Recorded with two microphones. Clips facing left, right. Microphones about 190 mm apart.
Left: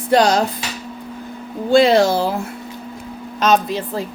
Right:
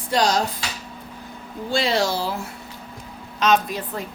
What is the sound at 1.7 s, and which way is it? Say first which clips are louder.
Speech: left 9 dB; 55° left (ahead or behind).